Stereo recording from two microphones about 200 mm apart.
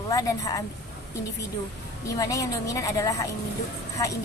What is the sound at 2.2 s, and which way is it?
A woman's voice, 15° left (ahead or behind).